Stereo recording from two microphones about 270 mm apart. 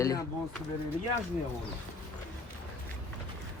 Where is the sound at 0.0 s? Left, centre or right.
Centre.